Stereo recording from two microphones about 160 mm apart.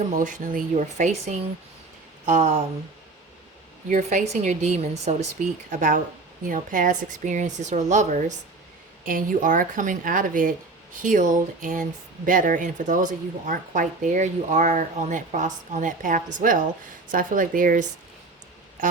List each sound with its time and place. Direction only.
0.2 s speech: 55° right (ahead or behind)
3.8 s speech: 50° right (ahead or behind)
6.4 s a woman's voice: 55° right (ahead or behind)